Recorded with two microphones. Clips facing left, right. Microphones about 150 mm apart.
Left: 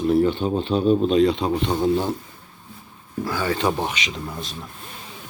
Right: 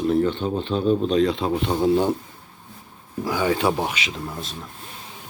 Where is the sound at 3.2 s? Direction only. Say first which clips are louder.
Right 2 dB; 15° right (ahead or behind).